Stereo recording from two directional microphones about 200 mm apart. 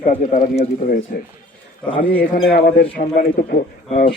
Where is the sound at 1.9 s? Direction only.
25° left (ahead or behind).